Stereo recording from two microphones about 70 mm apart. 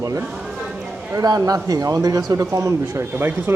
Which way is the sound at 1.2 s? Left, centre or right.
Right.